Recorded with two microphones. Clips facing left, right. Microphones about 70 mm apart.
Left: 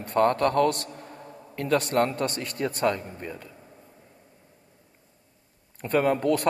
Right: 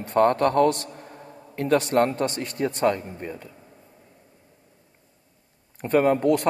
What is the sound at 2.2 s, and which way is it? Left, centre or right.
Speech, left.